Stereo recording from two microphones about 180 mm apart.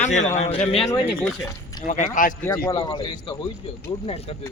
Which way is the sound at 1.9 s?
45° left (ahead or behind).